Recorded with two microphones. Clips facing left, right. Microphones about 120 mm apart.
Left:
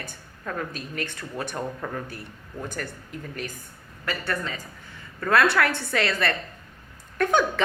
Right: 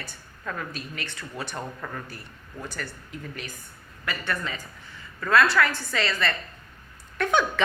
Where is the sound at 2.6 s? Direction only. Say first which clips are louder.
Left 3 dB; 50° left (ahead or behind).